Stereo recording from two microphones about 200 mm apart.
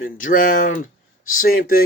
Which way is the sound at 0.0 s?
40° left (ahead or behind).